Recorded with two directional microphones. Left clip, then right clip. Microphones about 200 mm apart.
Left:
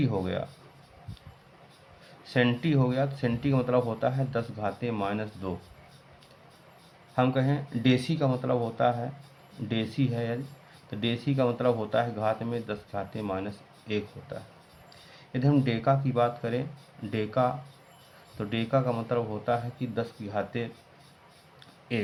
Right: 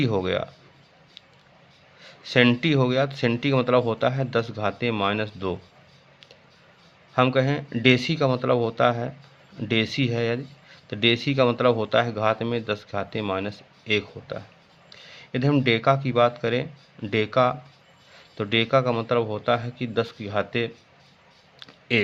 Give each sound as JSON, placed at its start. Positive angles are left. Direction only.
{"t": 0.0, "sound": "speech", "side_deg": -55}
{"t": 2.0, "sound": "speech", "side_deg": -55}
{"t": 7.2, "sound": "speech", "side_deg": -55}
{"t": 21.6, "sound": "a sound", "side_deg": -55}